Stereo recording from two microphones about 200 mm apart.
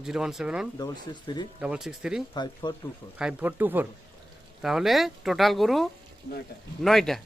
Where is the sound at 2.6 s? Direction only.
25° left (ahead or behind).